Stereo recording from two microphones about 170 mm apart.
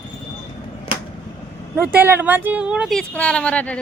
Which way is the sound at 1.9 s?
10° right (ahead or behind).